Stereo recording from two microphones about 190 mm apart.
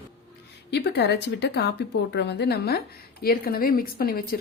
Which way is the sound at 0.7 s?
65° left (ahead or behind).